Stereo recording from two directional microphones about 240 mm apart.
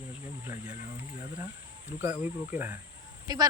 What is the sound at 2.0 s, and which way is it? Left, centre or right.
Speech, centre.